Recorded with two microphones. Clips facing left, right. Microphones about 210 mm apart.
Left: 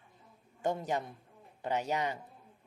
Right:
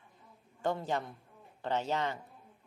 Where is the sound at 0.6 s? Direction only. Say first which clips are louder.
Even; 20° left (ahead or behind).